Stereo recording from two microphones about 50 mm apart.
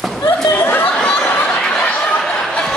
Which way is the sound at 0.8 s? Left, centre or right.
Left.